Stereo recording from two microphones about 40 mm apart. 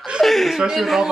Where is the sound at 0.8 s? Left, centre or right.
Centre.